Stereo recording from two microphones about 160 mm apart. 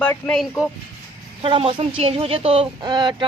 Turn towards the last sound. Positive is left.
turn(degrees=-25)  # may be behind; listen again after turning